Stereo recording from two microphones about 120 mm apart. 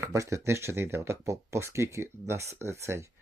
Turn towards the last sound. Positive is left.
turn(degrees=-25)  # may be behind; listen again after turning